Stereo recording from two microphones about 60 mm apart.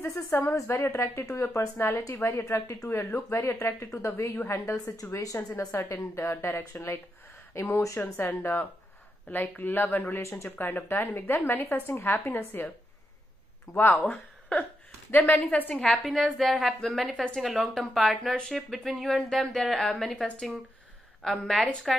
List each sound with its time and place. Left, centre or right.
0.1 s a woman's voice: left
0.7 s speech: left
4.7 s a woman's voice: left
5.7 s speech: left
6.3 s speech: left
7.8 s a woman's voice: left
8.2 s speech: left
10.2 s speech: left
10.9 s speech: left
13.7 s a woman's voice: left
15.7 s a woman's voice: centre